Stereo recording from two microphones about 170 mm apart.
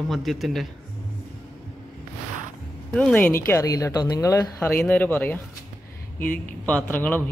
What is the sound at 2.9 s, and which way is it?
Speech, 10° left (ahead or behind).